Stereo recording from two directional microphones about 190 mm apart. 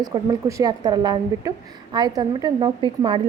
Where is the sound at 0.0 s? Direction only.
20° right (ahead or behind).